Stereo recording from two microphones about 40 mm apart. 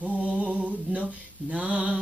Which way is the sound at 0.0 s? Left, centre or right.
Right.